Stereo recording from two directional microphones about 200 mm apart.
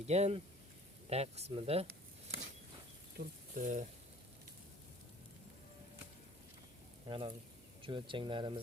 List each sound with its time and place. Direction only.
0.1 s speech: 30° right (ahead or behind)
3.2 s speech: 40° right (ahead or behind)
7.1 s speech: 25° right (ahead or behind)